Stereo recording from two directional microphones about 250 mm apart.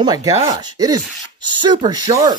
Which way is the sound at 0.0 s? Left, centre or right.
Centre.